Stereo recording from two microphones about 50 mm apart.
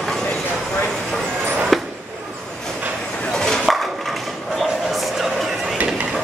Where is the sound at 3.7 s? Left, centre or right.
Centre.